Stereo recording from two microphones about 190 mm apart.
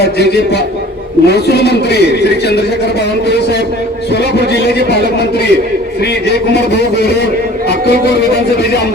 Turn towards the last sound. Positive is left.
turn(degrees=60)  # may be behind; listen again after turning